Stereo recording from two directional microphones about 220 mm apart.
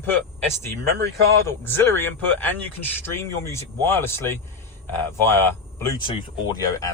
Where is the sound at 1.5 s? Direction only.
10° left (ahead or behind).